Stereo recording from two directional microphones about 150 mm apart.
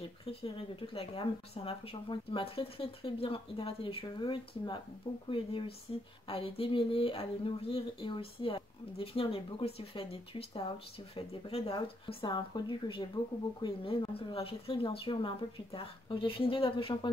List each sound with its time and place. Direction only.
0.2 s speech: 40° left (ahead or behind)